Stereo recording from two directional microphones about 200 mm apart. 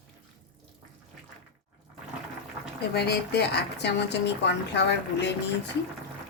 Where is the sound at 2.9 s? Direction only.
55° left (ahead or behind).